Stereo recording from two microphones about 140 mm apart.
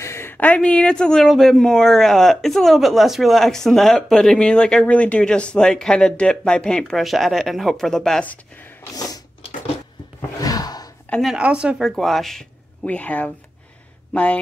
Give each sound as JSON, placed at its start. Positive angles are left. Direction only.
{"t": 0.0, "sound": "speech", "side_deg": 20}
{"t": 10.4, "sound": "a sound", "side_deg": 25}
{"t": 11.1, "sound": "speech", "side_deg": 0}